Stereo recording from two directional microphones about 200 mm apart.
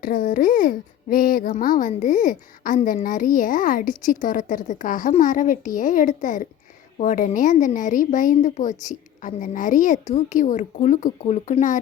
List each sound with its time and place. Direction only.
0.0 s speech: 45° left (ahead or behind)